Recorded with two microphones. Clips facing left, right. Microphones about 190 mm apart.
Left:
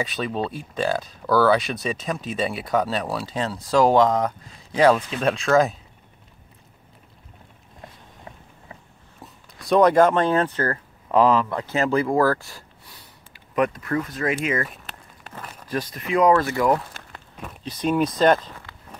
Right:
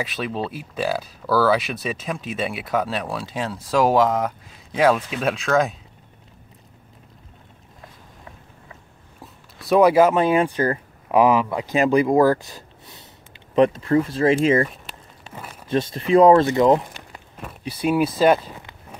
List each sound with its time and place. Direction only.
0.0 s speech: 5° right (ahead or behind)
9.2 s speech: 5° right (ahead or behind); by 14.7 s 30° right (ahead or behind)
15.7 s speech: 25° right (ahead or behind)
17.4 s speech: 5° right (ahead or behind)